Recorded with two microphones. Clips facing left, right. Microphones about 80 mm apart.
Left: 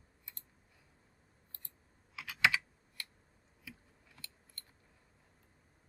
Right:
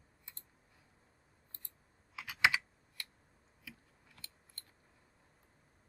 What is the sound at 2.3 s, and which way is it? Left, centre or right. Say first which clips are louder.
Computer keyboard: even; centre.